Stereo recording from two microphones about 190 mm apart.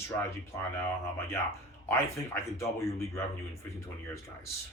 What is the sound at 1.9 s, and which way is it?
Speech, 15° left (ahead or behind).